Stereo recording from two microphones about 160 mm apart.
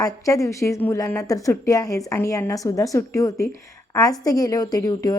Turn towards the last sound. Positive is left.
turn(degrees=25)  # may be behind; listen again after turning